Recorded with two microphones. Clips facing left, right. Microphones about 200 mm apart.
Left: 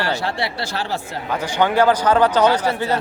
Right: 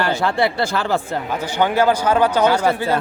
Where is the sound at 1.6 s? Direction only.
10° right (ahead or behind).